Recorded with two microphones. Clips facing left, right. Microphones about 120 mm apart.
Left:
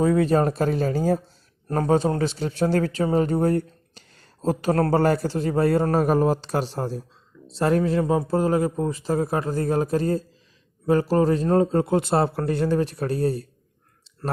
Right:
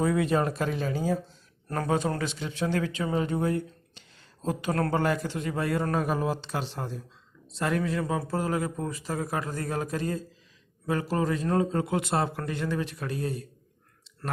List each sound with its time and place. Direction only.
0.0 s a man's voice: 30° left (ahead or behind)
1.6 s a man's voice: 30° left (ahead or behind)